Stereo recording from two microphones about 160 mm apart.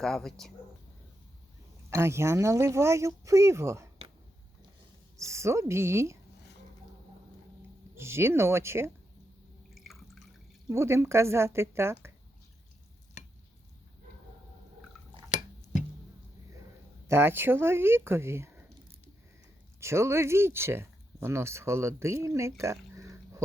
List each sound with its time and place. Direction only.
0.0 s speech: centre (ahead or behind)
1.9 s speech: 15° right (ahead or behind)
5.1 s speech: 20° right (ahead or behind)
7.9 s speech: 15° right (ahead or behind)
9.6 s drip: centre (ahead or behind)
10.7 s speech: 15° right (ahead or behind)
17.1 s speech: 15° right (ahead or behind)
19.8 s speech: 15° right (ahead or behind)